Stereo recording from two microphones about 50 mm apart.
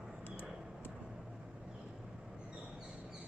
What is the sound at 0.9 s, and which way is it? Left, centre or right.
Vehicle, centre.